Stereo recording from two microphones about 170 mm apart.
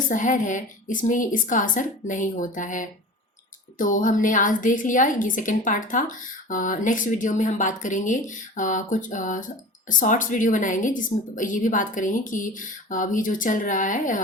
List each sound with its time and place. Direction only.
0.1 s a woman's voice: 50° left (ahead or behind)